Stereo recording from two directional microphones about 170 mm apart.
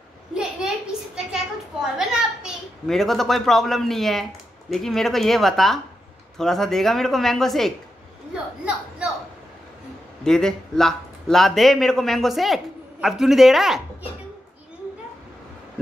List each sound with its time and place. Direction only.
0.3 s a sound: 5° right (ahead or behind)
2.0 s a child's voice: centre (ahead or behind)
10.2 s a man's voice: 5° left (ahead or behind)